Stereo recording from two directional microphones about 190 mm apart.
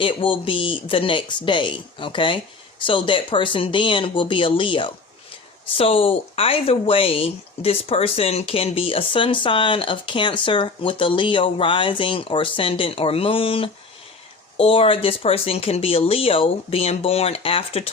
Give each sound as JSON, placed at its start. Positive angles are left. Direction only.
{"t": 0.0, "sound": "speech", "side_deg": 25}